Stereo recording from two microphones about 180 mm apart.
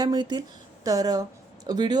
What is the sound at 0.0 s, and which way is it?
Speech, 25° right (ahead or behind).